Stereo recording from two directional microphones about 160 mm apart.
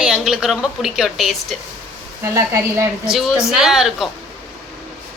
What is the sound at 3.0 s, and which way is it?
A woman's voice, 5° right (ahead or behind).